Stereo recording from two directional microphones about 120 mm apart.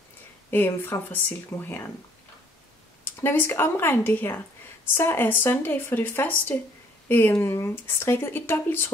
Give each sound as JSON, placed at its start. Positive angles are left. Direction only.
{"t": 0.5, "sound": "speech", "side_deg": 20}
{"t": 3.0, "sound": "speech", "side_deg": 20}